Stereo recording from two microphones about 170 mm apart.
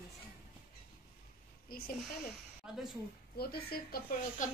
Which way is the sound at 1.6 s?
60° left (ahead or behind).